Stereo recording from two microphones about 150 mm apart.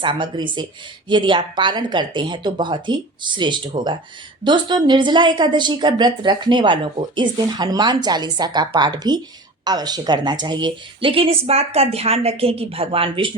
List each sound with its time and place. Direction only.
0.0 s speech: 30° right (ahead or behind)